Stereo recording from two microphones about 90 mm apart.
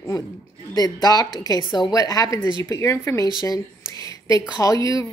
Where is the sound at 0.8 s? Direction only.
45° left (ahead or behind).